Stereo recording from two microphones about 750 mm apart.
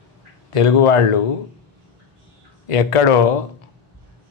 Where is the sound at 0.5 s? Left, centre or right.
Left.